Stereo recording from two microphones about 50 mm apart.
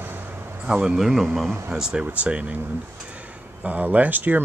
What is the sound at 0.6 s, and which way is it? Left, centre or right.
Speech, centre.